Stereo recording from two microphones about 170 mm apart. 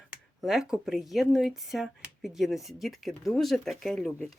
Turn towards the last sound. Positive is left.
turn(degrees=0)  # may be behind; listen again after turning